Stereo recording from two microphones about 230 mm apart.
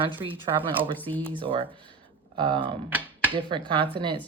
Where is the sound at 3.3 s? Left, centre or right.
Right.